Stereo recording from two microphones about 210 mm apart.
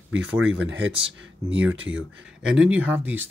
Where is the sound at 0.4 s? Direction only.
60° right (ahead or behind).